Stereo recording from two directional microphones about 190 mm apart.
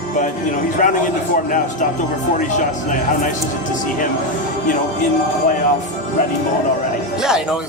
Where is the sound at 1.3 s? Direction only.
45° left (ahead or behind).